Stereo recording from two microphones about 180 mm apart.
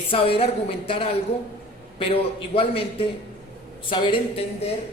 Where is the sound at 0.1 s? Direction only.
30° left (ahead or behind).